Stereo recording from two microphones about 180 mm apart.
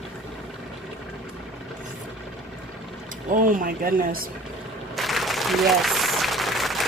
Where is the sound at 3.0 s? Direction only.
50° right (ahead or behind).